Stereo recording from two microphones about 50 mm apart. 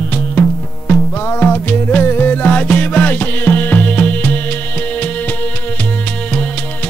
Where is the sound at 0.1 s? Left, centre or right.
Left.